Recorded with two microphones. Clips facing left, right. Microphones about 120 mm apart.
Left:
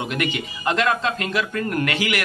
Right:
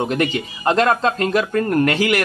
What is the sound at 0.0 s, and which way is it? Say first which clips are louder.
Speech: right 5 dB; 35° right (ahead or behind).